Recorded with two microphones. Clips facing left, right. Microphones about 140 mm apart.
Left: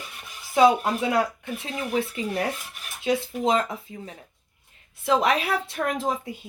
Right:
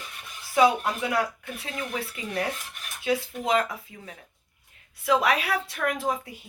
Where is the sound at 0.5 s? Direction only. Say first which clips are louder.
Left 3 dB; 25° left (ahead or behind).